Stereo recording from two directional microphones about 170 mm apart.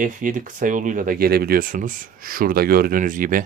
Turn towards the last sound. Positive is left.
turn(degrees=-50)  # may be behind; listen again after turning